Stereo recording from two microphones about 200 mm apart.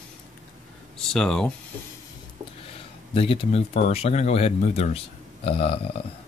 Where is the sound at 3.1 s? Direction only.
25° left (ahead or behind).